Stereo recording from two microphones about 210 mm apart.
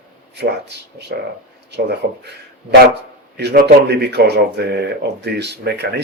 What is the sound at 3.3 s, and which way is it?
Speech, 50° right (ahead or behind).